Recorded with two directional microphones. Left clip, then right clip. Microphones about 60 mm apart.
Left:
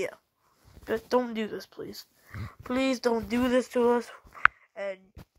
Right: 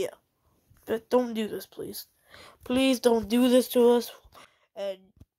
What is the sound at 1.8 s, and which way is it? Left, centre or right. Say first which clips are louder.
Speech: right 2 dB; centre.